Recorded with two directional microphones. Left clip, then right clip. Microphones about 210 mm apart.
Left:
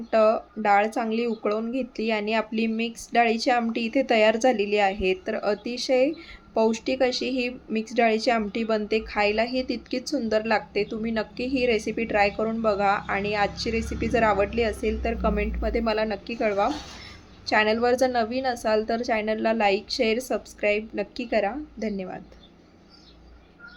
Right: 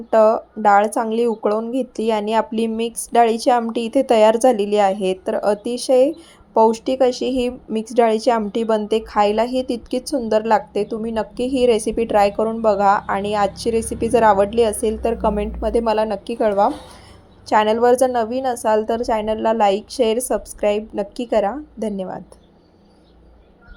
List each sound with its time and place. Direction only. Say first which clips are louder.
0.1 s a woman's voice: right 6 dB; 20° right (ahead or behind)